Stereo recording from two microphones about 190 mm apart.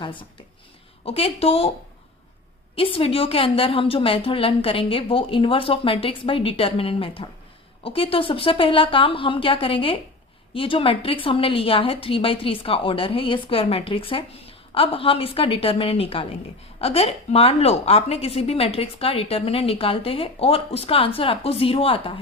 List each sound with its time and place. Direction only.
0.0 s a woman's voice: 25° left (ahead or behind)
2.7 s a woman's voice: 30° left (ahead or behind)